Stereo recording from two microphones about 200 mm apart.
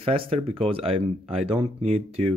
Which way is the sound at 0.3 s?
30° right (ahead or behind).